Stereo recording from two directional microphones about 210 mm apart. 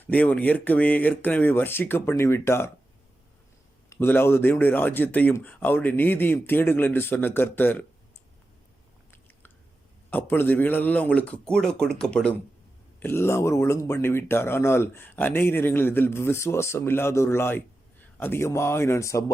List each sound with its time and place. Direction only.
0.0 s speech: 5° left (ahead or behind)
3.8 s speech: 10° left (ahead or behind)
10.1 s speech: 10° left (ahead or behind)